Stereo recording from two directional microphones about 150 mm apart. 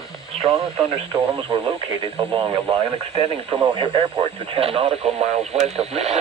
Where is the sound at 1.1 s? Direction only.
25° right (ahead or behind).